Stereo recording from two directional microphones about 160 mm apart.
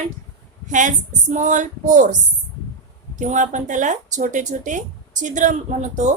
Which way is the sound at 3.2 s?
50° right (ahead or behind).